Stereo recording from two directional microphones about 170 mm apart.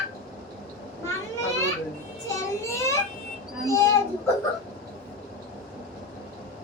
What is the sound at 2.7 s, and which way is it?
A child's voice, 15° left (ahead or behind).